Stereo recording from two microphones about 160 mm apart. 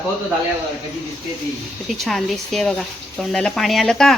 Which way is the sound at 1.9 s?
Centre (ahead or behind).